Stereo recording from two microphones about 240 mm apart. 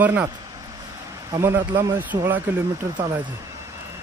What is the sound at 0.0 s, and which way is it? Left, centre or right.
Speech, centre.